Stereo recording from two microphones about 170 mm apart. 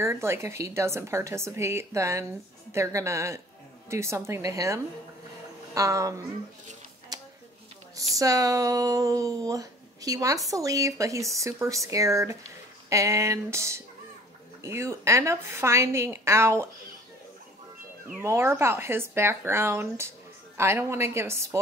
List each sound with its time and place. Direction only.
0.0 s speech: 15° right (ahead or behind)
8.1 s speech: 20° right (ahead or behind)
18.2 s speech: 15° right (ahead or behind)